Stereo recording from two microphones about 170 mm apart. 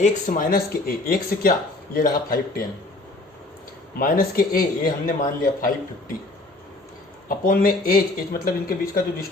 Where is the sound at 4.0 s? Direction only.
55° left (ahead or behind).